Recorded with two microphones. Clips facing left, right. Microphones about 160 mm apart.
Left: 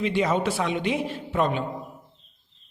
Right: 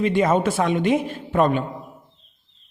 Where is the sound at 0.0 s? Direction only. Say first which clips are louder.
Right 5 dB; 50° right (ahead or behind).